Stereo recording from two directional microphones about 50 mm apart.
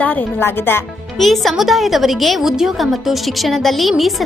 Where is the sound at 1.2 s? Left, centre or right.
Centre.